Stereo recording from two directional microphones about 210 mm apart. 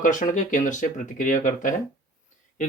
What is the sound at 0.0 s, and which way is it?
Speech, 40° left (ahead or behind).